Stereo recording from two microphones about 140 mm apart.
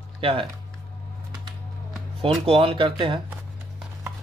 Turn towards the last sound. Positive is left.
turn(degrees=-35)  # may be behind; listen again after turning